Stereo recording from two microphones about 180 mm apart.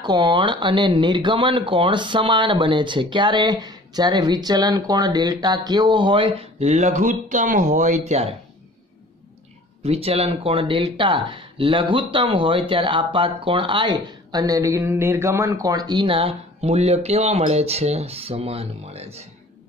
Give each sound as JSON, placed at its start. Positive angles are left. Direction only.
{"t": 0.0, "sound": "speech", "side_deg": -25}
{"t": 9.8, "sound": "speech", "side_deg": -35}